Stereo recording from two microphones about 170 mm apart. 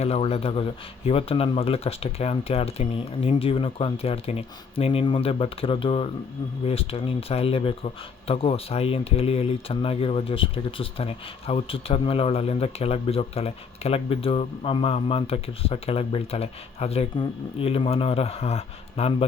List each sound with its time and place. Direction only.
0.0 s speech: 35° left (ahead or behind)